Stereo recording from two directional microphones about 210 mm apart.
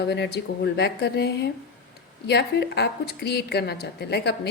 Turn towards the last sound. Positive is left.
turn(degrees=50)  # may be behind; listen again after turning